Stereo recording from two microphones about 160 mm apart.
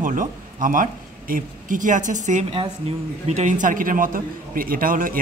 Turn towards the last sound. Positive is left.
turn(degrees=-60)  # may be behind; listen again after turning